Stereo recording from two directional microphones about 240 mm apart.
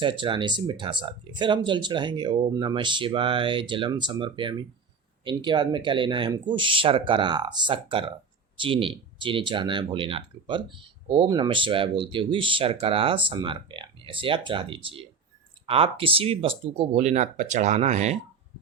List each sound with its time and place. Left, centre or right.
0.0 s speech: right